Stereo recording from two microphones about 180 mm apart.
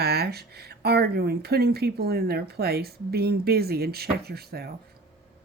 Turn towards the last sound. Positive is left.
turn(degrees=-60)  # may be behind; listen again after turning